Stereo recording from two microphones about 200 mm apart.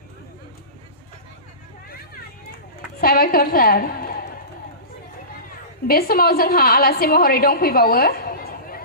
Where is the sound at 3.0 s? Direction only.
45° left (ahead or behind).